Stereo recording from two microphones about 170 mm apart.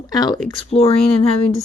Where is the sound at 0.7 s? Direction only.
35° left (ahead or behind).